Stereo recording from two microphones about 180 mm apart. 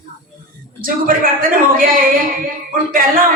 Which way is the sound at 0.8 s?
50° right (ahead or behind).